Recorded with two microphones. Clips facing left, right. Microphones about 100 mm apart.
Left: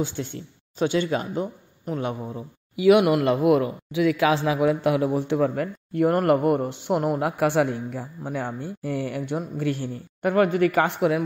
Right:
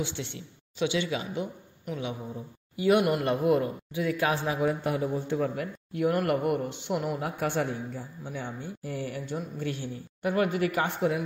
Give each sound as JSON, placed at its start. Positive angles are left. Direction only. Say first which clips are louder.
{"t": 0.0, "sound": "speech", "louder": "left 6 dB", "side_deg": 45}
{"t": 2.3, "sound": "speech", "louder": "left 5 dB", "side_deg": 90}
{"t": 5.6, "sound": "a man's voice", "louder": "left 6 dB", "side_deg": 50}
{"t": 10.8, "sound": "speech", "louder": "left 6 dB", "side_deg": 90}